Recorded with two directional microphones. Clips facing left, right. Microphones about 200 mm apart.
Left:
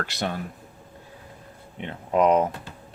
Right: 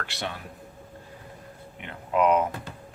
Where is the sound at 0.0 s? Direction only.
40° left (ahead or behind).